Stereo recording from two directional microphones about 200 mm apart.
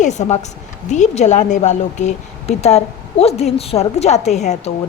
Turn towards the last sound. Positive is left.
turn(degrees=35)  # may be behind; listen again after turning